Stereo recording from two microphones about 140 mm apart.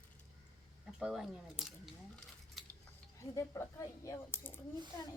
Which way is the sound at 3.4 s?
25° left (ahead or behind).